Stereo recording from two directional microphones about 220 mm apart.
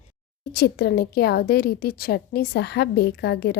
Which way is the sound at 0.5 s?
50° left (ahead or behind).